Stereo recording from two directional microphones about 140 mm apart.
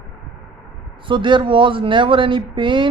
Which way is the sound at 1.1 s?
35° right (ahead or behind).